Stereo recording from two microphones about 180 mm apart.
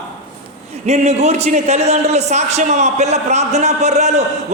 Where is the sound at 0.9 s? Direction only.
35° right (ahead or behind).